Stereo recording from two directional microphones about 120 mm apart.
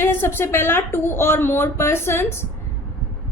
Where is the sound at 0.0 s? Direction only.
20° left (ahead or behind).